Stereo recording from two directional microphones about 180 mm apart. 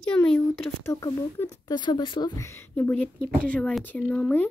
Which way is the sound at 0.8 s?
15° left (ahead or behind).